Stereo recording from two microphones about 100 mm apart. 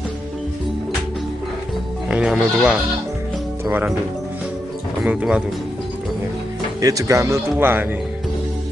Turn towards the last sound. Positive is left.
turn(degrees=-20)  # may be behind; listen again after turning